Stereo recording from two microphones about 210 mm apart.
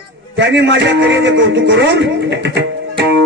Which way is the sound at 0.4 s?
60° right (ahead or behind).